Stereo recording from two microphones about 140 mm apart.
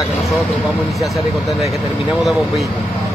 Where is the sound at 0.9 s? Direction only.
Centre (ahead or behind).